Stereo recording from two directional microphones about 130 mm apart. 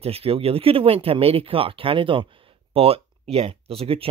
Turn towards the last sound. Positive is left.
turn(degrees=-45)  # may be behind; listen again after turning